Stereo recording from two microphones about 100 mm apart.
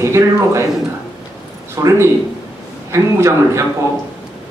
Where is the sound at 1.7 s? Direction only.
30° right (ahead or behind).